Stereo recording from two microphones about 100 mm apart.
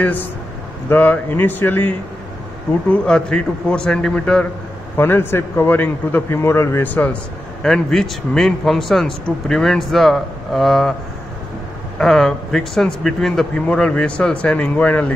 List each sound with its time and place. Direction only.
0.0 s a man's voice: 20° left (ahead or behind)
2.9 s a man's voice: 10° left (ahead or behind)
4.9 s a man's voice: 20° left (ahead or behind)
7.6 s speech: 5° left (ahead or behind)
12.0 s a man's voice: 5° left (ahead or behind)